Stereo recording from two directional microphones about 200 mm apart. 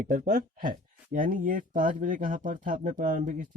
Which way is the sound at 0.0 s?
40° right (ahead or behind).